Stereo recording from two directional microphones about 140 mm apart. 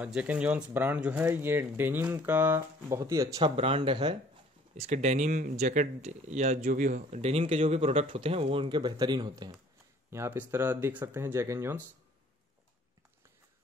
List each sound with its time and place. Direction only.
0.0 s speech: 10° right (ahead or behind); by 3.5 s 25° right (ahead or behind)
3.5 s speech: 40° right (ahead or behind)
4.7 s speech: 55° right (ahead or behind)
6.6 s speech: 70° right (ahead or behind)
7.2 s speech: 45° right (ahead or behind); by 9.6 s 30° right (ahead or behind)
10.1 s speech: 15° right (ahead or behind)